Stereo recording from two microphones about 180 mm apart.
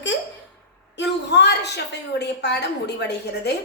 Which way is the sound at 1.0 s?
70° left (ahead or behind).